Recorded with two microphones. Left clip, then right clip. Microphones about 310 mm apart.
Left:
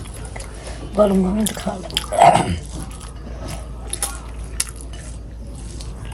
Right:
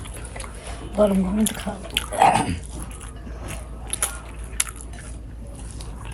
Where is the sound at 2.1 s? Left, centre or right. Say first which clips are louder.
Left 5 dB; left.